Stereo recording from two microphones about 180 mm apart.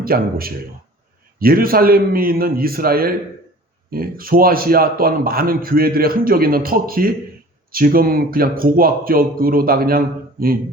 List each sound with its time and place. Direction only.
0.0 s a man's voice: 55° right (ahead or behind)